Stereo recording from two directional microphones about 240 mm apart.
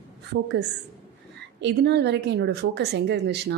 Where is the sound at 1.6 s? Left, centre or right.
Right.